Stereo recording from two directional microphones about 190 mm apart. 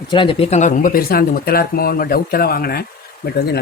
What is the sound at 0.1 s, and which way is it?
Speech, 25° left (ahead or behind).